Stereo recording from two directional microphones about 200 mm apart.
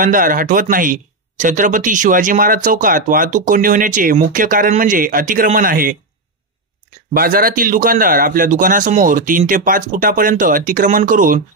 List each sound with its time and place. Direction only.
0.0 s a man's voice: 40° right (ahead or behind)
7.2 s a man's voice: 45° right (ahead or behind)